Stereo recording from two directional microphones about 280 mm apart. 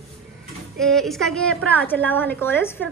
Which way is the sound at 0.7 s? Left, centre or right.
Centre.